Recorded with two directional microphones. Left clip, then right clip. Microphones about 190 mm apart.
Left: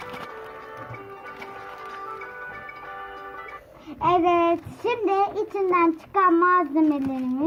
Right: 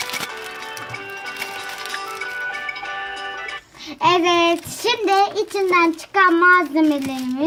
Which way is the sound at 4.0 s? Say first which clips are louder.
Right 4 dB; 20° right (ahead or behind).